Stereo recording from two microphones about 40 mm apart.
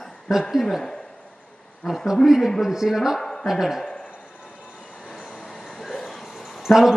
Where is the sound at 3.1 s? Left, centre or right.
Centre.